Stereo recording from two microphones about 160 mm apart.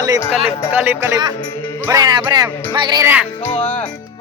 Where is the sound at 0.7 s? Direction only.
10° right (ahead or behind).